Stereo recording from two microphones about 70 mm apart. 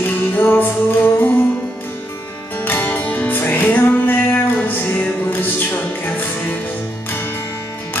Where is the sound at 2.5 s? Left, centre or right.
Left.